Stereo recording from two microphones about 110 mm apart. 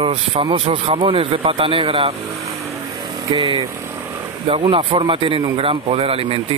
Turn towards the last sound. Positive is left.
turn(degrees=-60)  # may be behind; listen again after turning